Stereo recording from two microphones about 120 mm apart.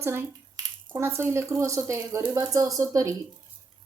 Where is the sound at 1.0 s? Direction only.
20° right (ahead or behind).